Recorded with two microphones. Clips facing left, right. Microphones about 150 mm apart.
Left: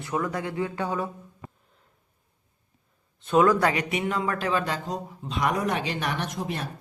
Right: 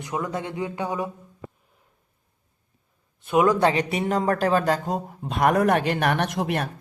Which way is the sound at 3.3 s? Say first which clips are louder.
Right 1 dB; 15° right (ahead or behind).